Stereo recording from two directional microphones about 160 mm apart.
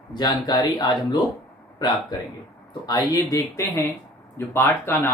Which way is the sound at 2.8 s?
20° left (ahead or behind).